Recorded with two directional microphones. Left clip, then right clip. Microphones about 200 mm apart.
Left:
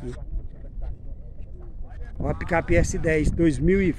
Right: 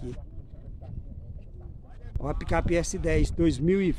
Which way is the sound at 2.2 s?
5° left (ahead or behind).